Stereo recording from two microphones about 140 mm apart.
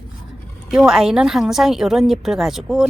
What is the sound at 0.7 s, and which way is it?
Speech, 5° right (ahead or behind).